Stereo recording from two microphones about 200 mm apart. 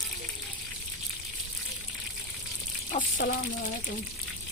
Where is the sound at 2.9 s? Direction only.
40° left (ahead or behind).